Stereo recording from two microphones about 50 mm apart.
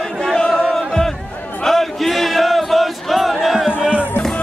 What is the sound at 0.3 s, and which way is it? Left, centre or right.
Chant, centre.